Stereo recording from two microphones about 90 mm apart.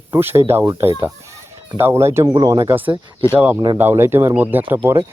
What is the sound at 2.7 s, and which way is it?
Speech, 20° right (ahead or behind).